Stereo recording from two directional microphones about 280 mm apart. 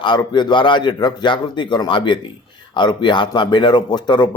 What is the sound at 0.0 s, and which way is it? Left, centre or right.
Speech, centre.